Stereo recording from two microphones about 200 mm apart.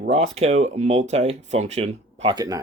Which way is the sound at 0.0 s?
35° right (ahead or behind).